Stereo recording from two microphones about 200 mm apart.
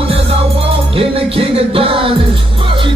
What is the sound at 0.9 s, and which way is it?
Music, 25° right (ahead or behind).